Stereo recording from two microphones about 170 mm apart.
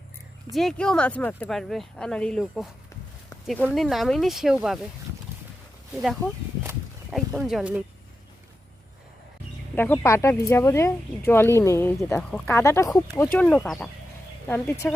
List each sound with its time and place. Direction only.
0.5 s speech: centre (ahead or behind)
7.1 s speech: centre (ahead or behind)
9.7 s speech: 15° left (ahead or behind)